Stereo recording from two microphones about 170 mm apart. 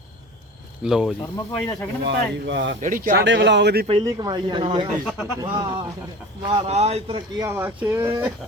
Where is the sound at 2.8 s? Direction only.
50° right (ahead or behind).